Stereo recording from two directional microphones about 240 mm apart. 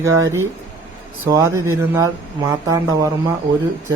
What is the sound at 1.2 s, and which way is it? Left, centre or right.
Speech, centre.